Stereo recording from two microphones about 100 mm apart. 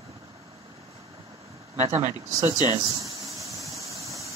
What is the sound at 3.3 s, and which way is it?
Vehicle, 30° right (ahead or behind).